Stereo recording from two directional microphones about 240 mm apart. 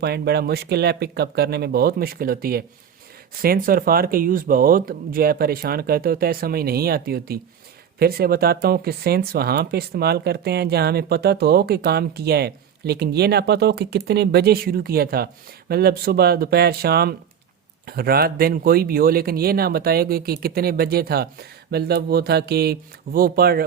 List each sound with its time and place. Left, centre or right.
0.0 s speech: right